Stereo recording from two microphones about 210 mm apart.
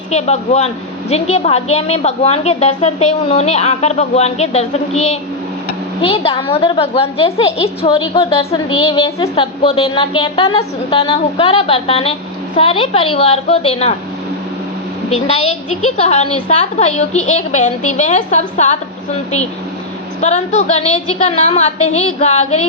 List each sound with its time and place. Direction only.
0.1 s a woman's voice: 30° left (ahead or behind)
16.0 s a woman's voice: 30° left (ahead or behind)
20.2 s a woman's voice: 35° left (ahead or behind)